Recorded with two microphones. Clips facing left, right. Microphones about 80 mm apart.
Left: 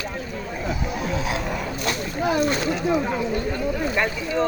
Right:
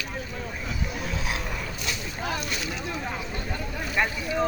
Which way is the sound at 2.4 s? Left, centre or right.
Left.